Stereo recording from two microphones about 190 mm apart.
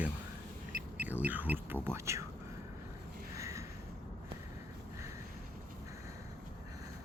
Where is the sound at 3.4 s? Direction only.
15° right (ahead or behind).